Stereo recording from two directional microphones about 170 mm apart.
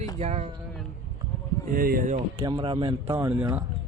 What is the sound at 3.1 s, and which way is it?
Speech, 15° right (ahead or behind).